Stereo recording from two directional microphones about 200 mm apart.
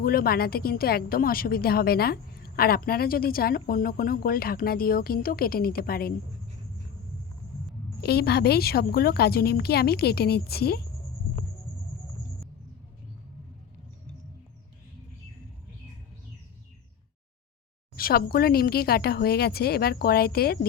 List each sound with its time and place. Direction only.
0.0 s a woman's voice: 50° left (ahead or behind)
8.0 s a woman's voice: 55° left (ahead or behind)
17.9 s a woman's voice: 50° left (ahead or behind)